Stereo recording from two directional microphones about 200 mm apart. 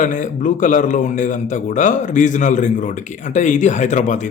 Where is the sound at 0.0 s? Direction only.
40° left (ahead or behind).